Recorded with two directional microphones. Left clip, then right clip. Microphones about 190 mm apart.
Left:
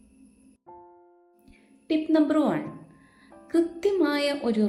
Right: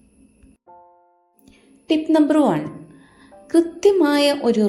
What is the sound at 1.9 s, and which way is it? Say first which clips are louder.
A woman's voice: right 6 dB; 15° right (ahead or behind).